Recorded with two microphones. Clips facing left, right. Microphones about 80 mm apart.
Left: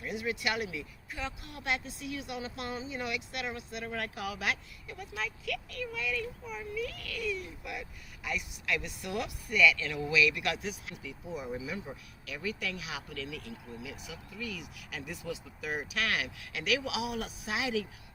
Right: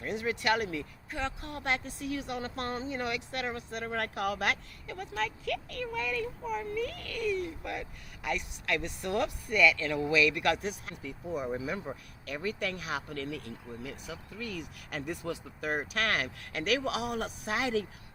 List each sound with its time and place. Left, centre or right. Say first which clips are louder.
0.0 s speech: right 3 dB; right
7.0 s speech: right 4 dB; right
7.3 s speech: right 5 dB; right